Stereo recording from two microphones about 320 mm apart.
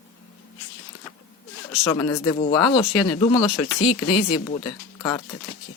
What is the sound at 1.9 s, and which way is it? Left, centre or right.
Speech, centre.